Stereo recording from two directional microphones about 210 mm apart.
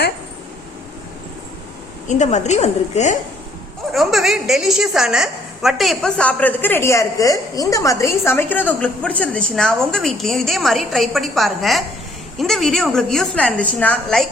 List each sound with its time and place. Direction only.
2.0 s a woman's voice: 35° left (ahead or behind)
3.9 s a woman's voice: centre (ahead or behind)